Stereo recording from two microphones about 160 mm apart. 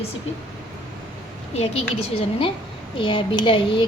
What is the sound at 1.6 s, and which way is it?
A woman's voice, 40° left (ahead or behind).